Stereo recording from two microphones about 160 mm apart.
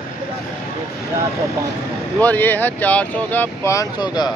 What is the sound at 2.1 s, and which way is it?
Speech, 10° left (ahead or behind).